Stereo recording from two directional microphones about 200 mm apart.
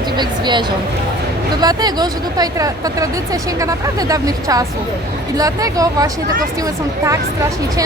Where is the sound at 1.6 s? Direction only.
20° right (ahead or behind).